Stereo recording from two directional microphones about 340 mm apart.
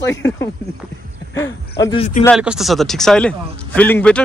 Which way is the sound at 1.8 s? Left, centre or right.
Centre.